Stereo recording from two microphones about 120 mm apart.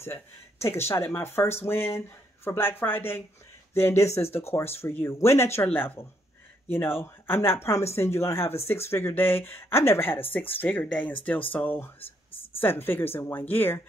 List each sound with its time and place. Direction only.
0.0 s speech: 20° left (ahead or behind)